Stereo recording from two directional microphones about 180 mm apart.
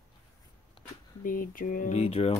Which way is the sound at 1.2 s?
50° left (ahead or behind).